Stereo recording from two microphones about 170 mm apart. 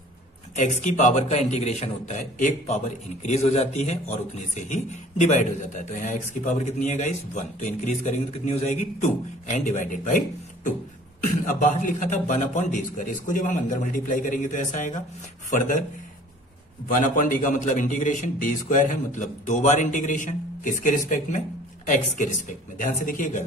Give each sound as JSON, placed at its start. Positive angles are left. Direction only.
{"t": 0.6, "sound": "a man's voice", "side_deg": 45}
{"t": 16.8, "sound": "a man's voice", "side_deg": 50}